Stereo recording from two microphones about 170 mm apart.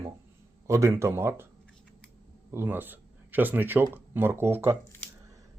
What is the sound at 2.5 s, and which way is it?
Speech, 10° right (ahead or behind).